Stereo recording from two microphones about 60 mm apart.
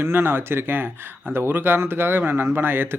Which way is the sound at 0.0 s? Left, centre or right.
Right.